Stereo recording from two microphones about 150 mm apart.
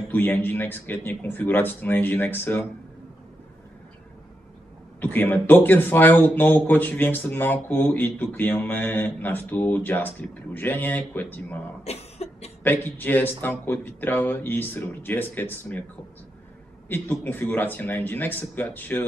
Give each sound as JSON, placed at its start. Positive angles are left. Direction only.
{"t": 0.1, "sound": "speech", "side_deg": 15}
{"t": 5.0, "sound": "speech", "side_deg": 10}
{"t": 11.8, "sound": "cough", "side_deg": 45}
{"t": 12.6, "sound": "speech", "side_deg": 15}
{"t": 16.9, "sound": "speech", "side_deg": 10}